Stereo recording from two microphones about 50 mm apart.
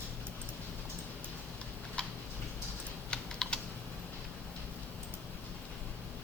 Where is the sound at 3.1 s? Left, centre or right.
Left.